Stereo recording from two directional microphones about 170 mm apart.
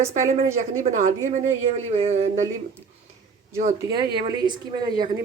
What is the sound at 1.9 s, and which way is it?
Speech, 40° right (ahead or behind).